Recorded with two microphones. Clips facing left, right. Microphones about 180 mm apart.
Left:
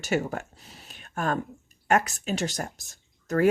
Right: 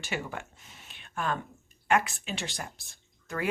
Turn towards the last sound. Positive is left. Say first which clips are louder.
# left 10 dB
turn(degrees=45)  # may be behind; listen again after turning